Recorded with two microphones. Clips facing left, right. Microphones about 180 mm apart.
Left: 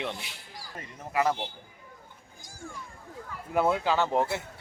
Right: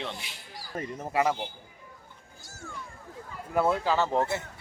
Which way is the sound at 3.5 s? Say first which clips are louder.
Even; centre (ahead or behind).